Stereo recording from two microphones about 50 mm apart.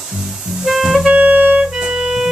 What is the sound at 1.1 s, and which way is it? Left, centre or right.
Music, right.